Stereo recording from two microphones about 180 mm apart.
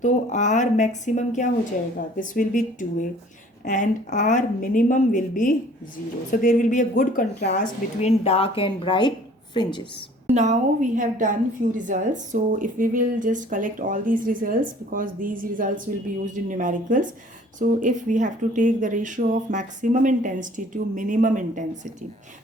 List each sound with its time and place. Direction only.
0.0 s a woman's voice: 40° left (ahead or behind); by 9.8 s 25° left (ahead or behind)
10.3 s a woman's voice: 40° right (ahead or behind)